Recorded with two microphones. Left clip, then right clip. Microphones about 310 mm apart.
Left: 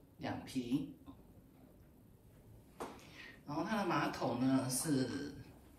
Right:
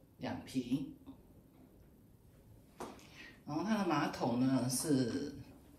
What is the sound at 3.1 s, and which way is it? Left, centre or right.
Speech, centre.